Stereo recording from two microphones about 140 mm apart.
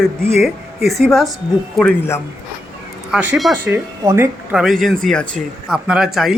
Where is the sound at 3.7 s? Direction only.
20° right (ahead or behind).